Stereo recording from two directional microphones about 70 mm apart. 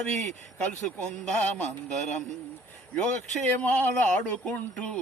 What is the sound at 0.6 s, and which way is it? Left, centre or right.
Speech, centre.